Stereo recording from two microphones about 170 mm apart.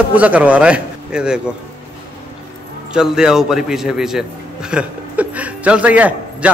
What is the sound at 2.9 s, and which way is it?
A man's voice, 5° right (ahead or behind).